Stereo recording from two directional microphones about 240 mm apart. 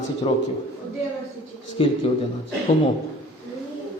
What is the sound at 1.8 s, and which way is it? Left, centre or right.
Speech, left.